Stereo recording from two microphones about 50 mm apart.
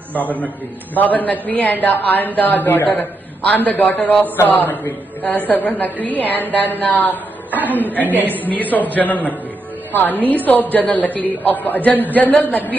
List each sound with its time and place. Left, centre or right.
1.1 s a woman's voice: left
8.1 s a woman's voice: right
8.5 s a woman's voice: left